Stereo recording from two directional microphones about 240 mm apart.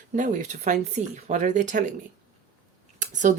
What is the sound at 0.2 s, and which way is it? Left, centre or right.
Speech, right.